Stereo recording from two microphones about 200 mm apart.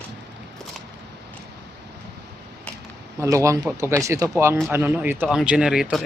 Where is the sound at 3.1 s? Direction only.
15° right (ahead or behind).